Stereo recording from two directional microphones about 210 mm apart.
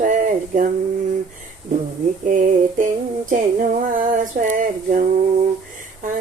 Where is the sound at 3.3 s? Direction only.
40° right (ahead or behind).